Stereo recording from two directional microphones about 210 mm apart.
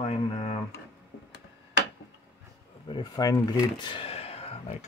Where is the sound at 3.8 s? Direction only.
25° left (ahead or behind).